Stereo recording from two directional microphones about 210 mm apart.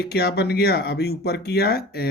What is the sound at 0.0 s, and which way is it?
Speech, 50° left (ahead or behind).